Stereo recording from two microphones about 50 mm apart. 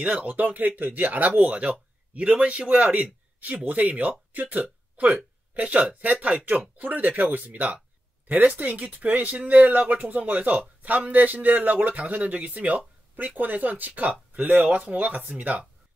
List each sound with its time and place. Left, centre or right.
0.0 s a man's voice: right